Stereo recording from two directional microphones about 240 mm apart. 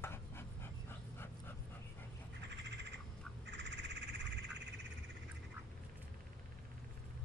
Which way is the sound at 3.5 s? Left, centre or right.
Right.